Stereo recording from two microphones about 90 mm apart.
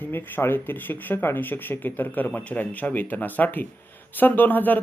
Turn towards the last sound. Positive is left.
turn(degrees=20)  # may be behind; listen again after turning